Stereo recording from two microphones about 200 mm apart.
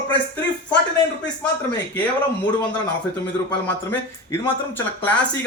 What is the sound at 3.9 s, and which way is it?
Speech, 10° left (ahead or behind).